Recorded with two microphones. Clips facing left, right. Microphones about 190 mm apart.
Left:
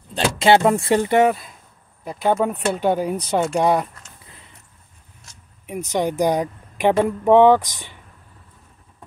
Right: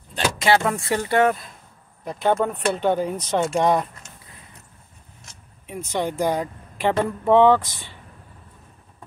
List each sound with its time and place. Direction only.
0.1 s speech: 30° left (ahead or behind)
2.0 s speech: 5° left (ahead or behind)
5.7 s speech: 15° left (ahead or behind)